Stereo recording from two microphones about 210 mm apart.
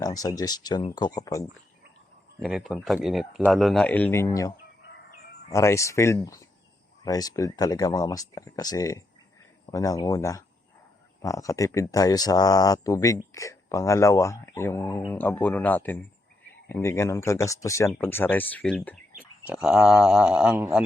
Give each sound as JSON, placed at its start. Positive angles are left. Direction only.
{"t": 0.0, "sound": "speech", "side_deg": 15}
{"t": 2.4, "sound": "speech", "side_deg": 0}